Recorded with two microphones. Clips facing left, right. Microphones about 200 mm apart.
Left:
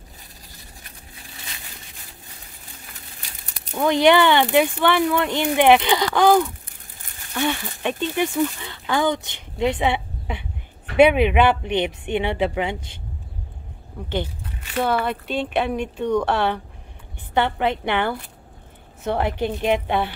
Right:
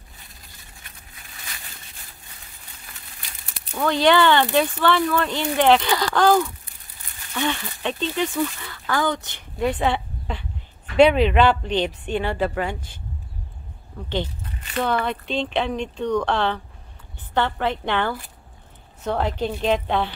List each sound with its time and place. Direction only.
0.8 s a sound: 30° left (ahead or behind)
3.7 s speech: 15° left (ahead or behind)
14.1 s speech: 10° left (ahead or behind)